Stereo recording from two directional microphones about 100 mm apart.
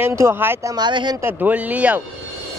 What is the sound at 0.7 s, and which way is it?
Speech, 50° right (ahead or behind).